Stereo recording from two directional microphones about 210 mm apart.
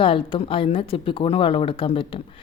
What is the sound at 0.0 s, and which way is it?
A woman's voice, 25° left (ahead or behind).